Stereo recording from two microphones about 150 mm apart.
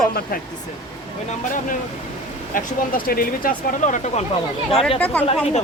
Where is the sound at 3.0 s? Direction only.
75° left (ahead or behind); by 4.2 s 55° left (ahead or behind).